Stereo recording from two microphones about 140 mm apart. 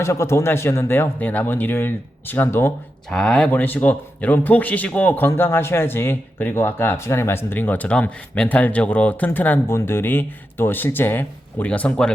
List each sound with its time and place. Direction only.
0.0 s speech: 20° left (ahead or behind)
3.1 s speech: 5° left (ahead or behind)